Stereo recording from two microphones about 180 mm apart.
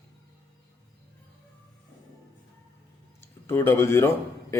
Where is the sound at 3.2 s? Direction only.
15° left (ahead or behind).